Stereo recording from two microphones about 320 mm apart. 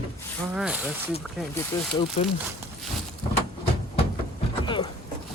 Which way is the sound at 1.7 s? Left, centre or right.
Centre.